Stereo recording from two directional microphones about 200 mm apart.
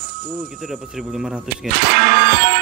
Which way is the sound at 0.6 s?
Centre (ahead or behind).